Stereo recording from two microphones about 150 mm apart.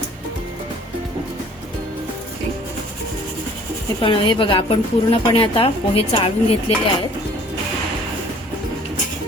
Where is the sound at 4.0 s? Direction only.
35° left (ahead or behind).